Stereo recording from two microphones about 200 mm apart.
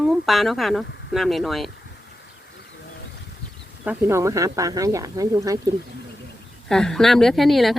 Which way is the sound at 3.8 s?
10° right (ahead or behind).